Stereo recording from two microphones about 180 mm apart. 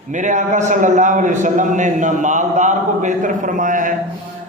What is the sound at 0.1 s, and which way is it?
A man's voice, 45° right (ahead or behind).